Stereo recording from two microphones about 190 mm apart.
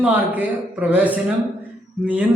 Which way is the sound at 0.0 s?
10° right (ahead or behind).